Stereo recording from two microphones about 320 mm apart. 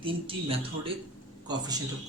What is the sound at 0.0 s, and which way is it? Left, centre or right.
A man's voice, centre.